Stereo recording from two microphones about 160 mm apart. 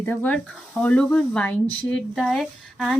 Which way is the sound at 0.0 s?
10° left (ahead or behind).